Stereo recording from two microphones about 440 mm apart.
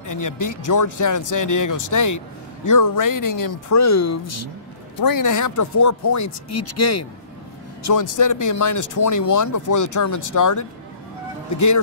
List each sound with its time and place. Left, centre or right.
0.0 s speech: left
4.9 s speech: left